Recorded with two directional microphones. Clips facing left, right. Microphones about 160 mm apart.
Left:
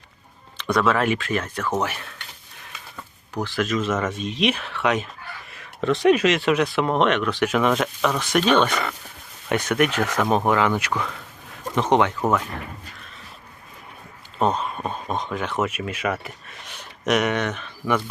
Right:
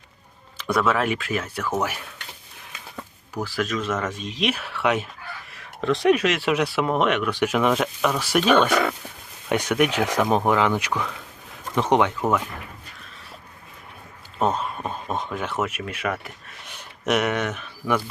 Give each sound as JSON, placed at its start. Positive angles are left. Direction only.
{"t": 0.5, "sound": "speech", "side_deg": -5}
{"t": 3.4, "sound": "speech", "side_deg": 0}
{"t": 14.4, "sound": "speech", "side_deg": -5}